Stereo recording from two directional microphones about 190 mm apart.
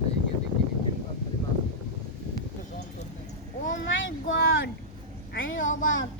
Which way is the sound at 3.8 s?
90° left.